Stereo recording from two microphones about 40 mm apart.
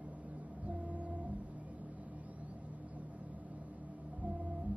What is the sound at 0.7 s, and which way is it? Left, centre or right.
Music, right.